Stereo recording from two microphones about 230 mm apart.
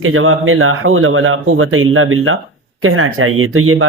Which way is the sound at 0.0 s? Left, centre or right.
Right.